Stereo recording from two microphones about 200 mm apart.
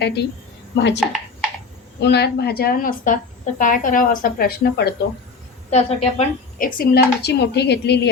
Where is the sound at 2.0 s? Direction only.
55° left (ahead or behind).